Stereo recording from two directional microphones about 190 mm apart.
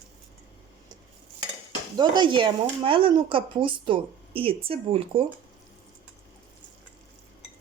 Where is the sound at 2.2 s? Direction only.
25° right (ahead or behind).